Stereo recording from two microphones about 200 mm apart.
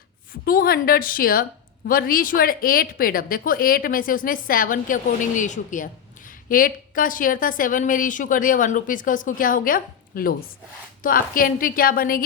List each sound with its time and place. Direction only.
0.4 s a woman's voice: 45° left (ahead or behind)